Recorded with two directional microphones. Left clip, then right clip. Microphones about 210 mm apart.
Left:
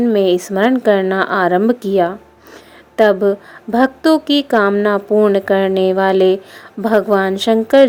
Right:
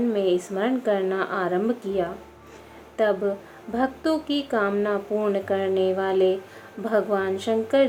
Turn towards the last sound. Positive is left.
turn(degrees=45)  # may be behind; listen again after turning